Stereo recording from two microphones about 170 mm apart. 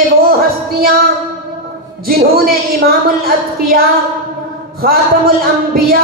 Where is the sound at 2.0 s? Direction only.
60° right (ahead or behind).